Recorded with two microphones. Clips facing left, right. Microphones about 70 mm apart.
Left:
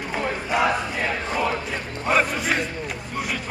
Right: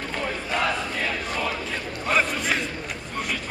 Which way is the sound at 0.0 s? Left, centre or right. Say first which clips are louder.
Left 3 dB; centre.